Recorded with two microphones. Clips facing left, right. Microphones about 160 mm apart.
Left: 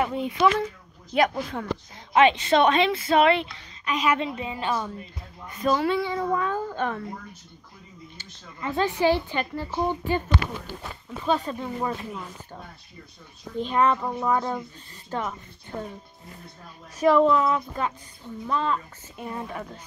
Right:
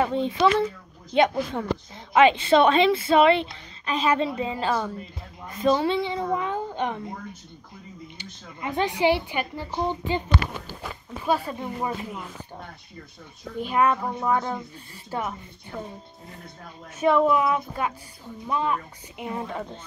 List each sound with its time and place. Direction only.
0.0 s a child's voice: 30° right (ahead or behind)
8.2 s speech: 15° right (ahead or behind)
13.6 s speech: 10° right (ahead or behind)
15.7 s speech: 25° left (ahead or behind)
17.0 s a child's voice: 10° right (ahead or behind); by 19.8 s 25° right (ahead or behind)